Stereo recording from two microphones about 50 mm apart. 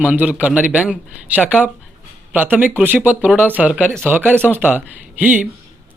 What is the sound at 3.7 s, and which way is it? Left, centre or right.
Speech, right.